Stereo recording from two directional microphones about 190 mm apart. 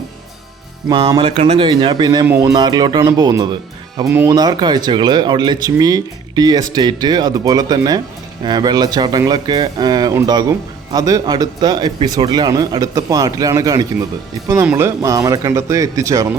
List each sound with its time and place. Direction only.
0.9 s speech: 25° right (ahead or behind)